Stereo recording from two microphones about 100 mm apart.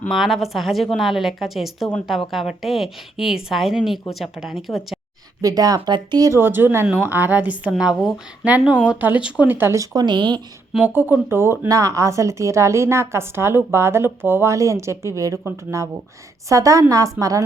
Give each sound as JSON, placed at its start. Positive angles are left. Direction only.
{"t": 0.1, "sound": "a woman's voice", "side_deg": 0}
{"t": 5.4, "sound": "speech", "side_deg": -40}
{"t": 6.4, "sound": "speech", "side_deg": -20}
{"t": 7.7, "sound": "speech", "side_deg": -5}
{"t": 10.8, "sound": "speech", "side_deg": -20}